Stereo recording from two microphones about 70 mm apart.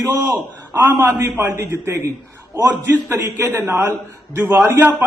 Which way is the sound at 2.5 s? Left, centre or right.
Right.